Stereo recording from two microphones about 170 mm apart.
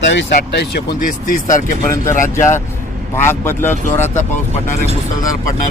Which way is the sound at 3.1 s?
15° left (ahead or behind).